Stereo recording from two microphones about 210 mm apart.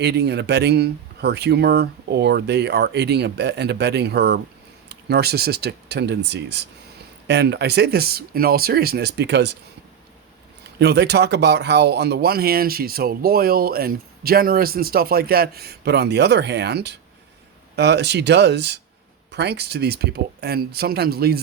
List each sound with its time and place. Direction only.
0.0 s speech: 50° right (ahead or behind)
10.8 s speech: 50° right (ahead or behind)